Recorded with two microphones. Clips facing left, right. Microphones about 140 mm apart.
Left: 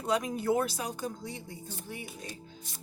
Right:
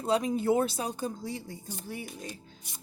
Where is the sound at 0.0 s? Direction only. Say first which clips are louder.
Right 3 dB; 30° right (ahead or behind).